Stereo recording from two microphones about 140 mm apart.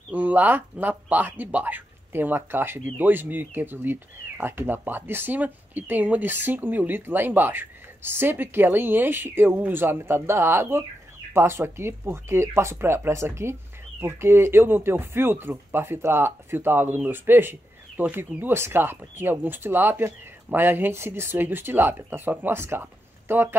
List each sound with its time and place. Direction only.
0.1 s speech: 10° right (ahead or behind)